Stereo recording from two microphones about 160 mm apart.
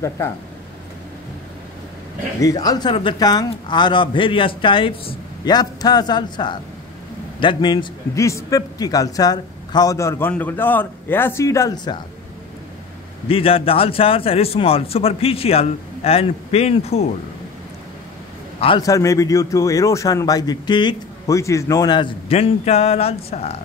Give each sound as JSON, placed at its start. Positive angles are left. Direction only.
{"t": 2.4, "sound": "a man's voice", "side_deg": 25}
{"t": 13.3, "sound": "a man's voice", "side_deg": 35}
{"t": 18.8, "sound": "a man's voice", "side_deg": 20}